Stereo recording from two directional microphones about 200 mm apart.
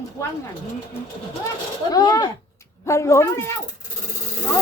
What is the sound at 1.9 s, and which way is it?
Speech, 20° left (ahead or behind).